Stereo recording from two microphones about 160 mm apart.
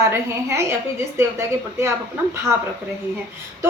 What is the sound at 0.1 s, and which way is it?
A woman's voice, 15° right (ahead or behind).